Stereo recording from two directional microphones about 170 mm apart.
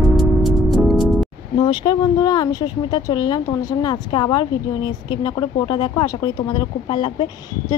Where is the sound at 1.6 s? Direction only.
25° left (ahead or behind).